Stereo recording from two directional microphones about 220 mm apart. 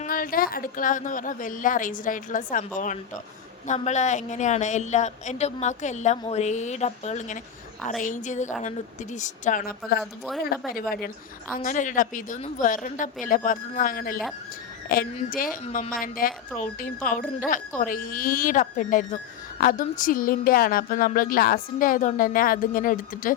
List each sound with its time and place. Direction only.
0.0 s speech: 40° left (ahead or behind)
10.0 s speech: centre (ahead or behind)
10.7 s speech: 40° left (ahead or behind)